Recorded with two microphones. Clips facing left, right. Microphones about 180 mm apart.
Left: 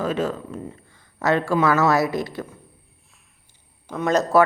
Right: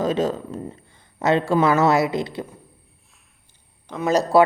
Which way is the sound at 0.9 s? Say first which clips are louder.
Right 1 dB; 20° right (ahead or behind).